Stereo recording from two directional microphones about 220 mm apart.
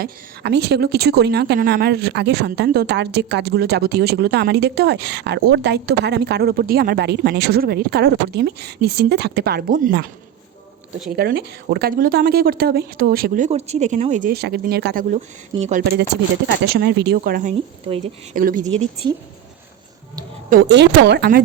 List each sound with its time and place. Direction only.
0.0 s speech: 45° right (ahead or behind)
11.2 s speech: 45° right (ahead or behind)
15.6 s speech: 35° right (ahead or behind)
16.6 s speech: 50° right (ahead or behind)
20.5 s speech: 50° right (ahead or behind)